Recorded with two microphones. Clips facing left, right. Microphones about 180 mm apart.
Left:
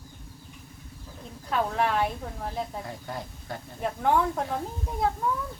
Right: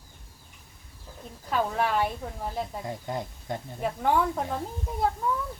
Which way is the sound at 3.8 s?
Centre (ahead or behind).